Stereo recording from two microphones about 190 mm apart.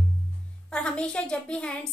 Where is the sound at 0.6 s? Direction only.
5° left (ahead or behind).